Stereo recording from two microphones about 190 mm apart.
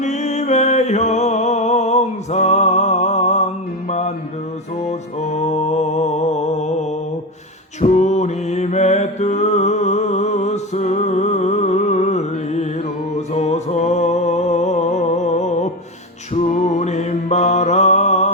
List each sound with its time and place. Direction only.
0.0 s music: 35° left (ahead or behind)
7.8 s music: 35° left (ahead or behind)
16.3 s mantra: 35° left (ahead or behind)